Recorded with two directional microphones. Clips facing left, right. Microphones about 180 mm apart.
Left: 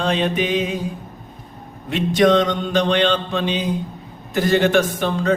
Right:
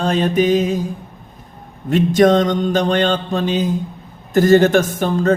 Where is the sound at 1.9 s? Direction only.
45° right (ahead or behind).